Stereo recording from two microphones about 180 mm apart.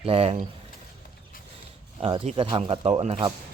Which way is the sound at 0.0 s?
35° right (ahead or behind).